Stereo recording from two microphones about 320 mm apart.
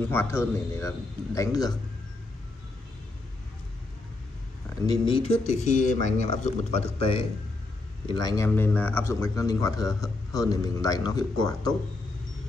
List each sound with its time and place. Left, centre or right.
0.1 s speech: centre
4.8 s speech: centre